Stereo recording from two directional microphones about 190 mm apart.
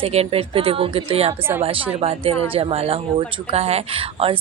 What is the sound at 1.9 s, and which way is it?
Speech, 30° right (ahead or behind).